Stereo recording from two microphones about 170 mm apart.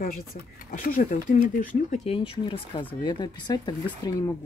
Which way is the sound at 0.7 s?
60° left (ahead or behind).